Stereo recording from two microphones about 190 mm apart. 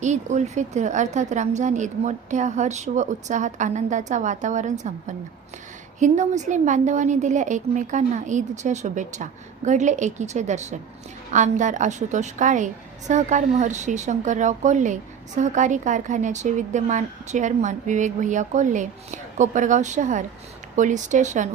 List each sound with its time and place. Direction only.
0.0 s a woman's voice: 40° right (ahead or behind)